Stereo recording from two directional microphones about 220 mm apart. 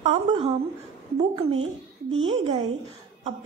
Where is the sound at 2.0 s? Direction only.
60° right (ahead or behind).